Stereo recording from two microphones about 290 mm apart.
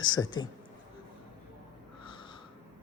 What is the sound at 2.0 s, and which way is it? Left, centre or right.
Snort, centre.